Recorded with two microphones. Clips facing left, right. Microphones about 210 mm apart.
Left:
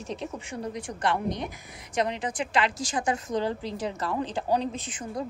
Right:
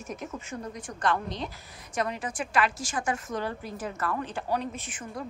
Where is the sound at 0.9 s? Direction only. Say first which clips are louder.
Left 1 dB; 20° left (ahead or behind).